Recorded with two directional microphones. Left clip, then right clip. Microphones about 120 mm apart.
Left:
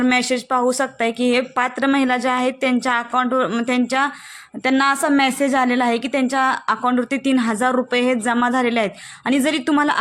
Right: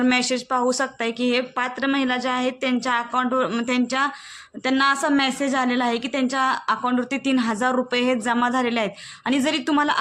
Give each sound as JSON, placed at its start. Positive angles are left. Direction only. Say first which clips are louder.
{"t": 0.0, "sound": "a woman's voice", "louder": "left 3 dB", "side_deg": 40}